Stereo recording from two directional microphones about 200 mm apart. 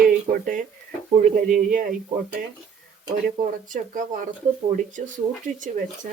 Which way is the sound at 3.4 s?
40° right (ahead or behind).